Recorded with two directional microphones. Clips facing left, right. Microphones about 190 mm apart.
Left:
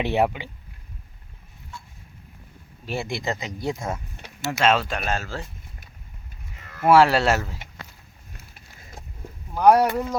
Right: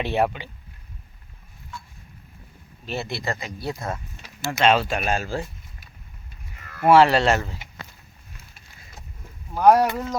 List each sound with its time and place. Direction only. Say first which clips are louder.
0.0 s speech: left 1 dB; 15° left (ahead or behind)
2.8 s speech: left 1 dB; 10° left (ahead or behind)
4.4 s speech: right 1 dB; 5° left (ahead or behind)
4.9 s speech: right 3 dB; 15° right (ahead or behind)
6.8 s speech: right 1 dB; centre (ahead or behind)
8.8 s a sound: left 4 dB; 45° left (ahead or behind)
9.6 s speech: even; centre (ahead or behind)